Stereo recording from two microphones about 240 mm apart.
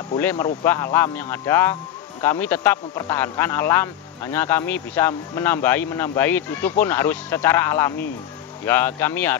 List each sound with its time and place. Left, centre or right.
0.1 s speech: centre